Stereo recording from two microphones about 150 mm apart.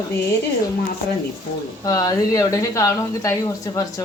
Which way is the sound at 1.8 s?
25° left (ahead or behind).